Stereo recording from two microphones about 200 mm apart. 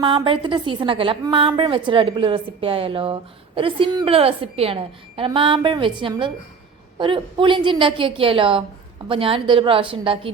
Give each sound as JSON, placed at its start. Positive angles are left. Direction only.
{"t": 0.0, "sound": "a woman's voice", "side_deg": -25}